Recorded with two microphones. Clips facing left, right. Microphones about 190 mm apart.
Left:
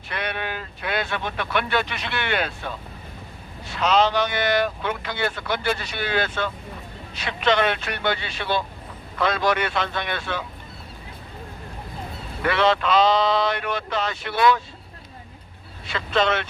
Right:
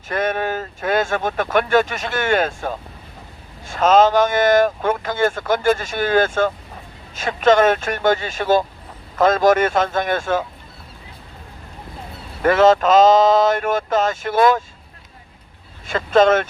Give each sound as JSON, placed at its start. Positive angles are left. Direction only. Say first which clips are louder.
{"t": 0.1, "sound": "speech", "louder": "right 8 dB", "side_deg": -45}
{"t": 12.4, "sound": "speech", "louder": "right 7 dB", "side_deg": -45}
{"t": 15.9, "sound": "speech", "louder": "right 8 dB", "side_deg": -45}